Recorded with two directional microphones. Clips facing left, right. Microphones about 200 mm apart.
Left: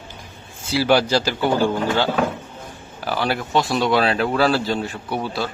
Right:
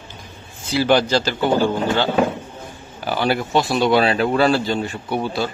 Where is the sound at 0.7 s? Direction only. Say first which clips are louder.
Right 1 dB; 5° left (ahead or behind).